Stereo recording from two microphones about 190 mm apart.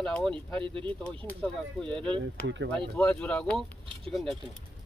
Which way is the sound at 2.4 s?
70° right (ahead or behind).